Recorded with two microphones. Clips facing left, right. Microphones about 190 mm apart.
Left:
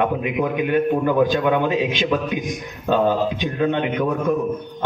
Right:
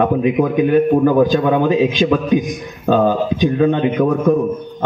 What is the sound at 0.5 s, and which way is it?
A man's voice, 40° right (ahead or behind).